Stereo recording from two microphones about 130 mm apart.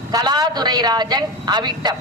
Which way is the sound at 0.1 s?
30° right (ahead or behind).